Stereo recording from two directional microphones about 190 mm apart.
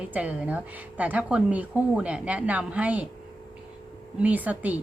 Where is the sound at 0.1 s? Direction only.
10° right (ahead or behind).